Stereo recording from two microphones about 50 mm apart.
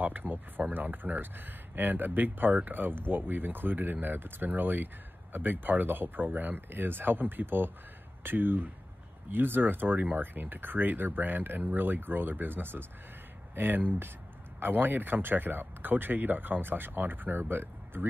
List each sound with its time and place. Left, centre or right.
0.0 s speech: right